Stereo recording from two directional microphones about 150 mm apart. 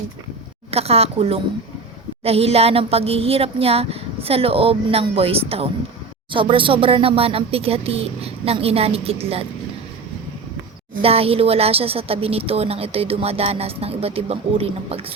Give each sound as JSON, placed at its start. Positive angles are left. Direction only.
{"t": 0.7, "sound": "a woman's voice", "side_deg": -40}
{"t": 11.0, "sound": "a woman's voice", "side_deg": -40}